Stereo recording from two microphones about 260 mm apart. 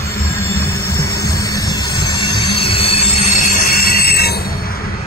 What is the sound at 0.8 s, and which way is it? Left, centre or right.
Music, centre.